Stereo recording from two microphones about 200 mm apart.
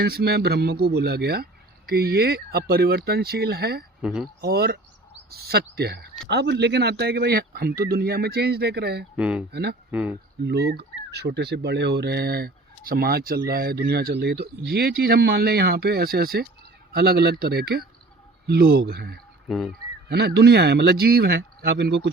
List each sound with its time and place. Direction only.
0.0 s speech: 50° right (ahead or behind)
4.0 s speech: 5° right (ahead or behind)
4.4 s speech: 50° right (ahead or behind)
9.1 s speech: 5° right (ahead or behind)
9.5 s speech: 55° right (ahead or behind)
9.9 s speech: 5° right (ahead or behind)
10.4 s speech: 55° right (ahead or behind)
19.5 s speech: centre (ahead or behind)
20.1 s speech: 55° right (ahead or behind)